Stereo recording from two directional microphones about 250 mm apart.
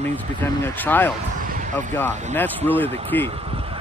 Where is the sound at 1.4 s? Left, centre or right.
Right.